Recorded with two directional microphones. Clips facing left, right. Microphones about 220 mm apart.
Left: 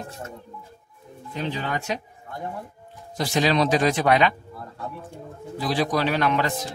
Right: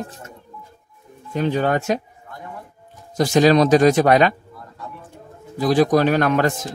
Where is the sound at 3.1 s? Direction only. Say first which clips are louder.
Right 7 dB; 45° right (ahead or behind).